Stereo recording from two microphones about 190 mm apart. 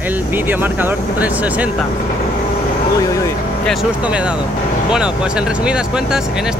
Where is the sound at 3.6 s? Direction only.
5° right (ahead or behind).